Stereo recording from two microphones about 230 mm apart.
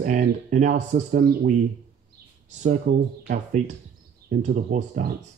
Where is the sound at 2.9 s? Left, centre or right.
Right.